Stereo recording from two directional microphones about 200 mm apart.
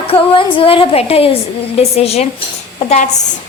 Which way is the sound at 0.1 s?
30° left (ahead or behind).